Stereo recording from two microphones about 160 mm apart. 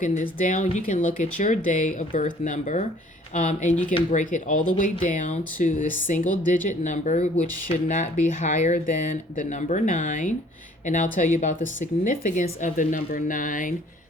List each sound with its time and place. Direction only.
0.0 s a woman's voice: 50° left (ahead or behind)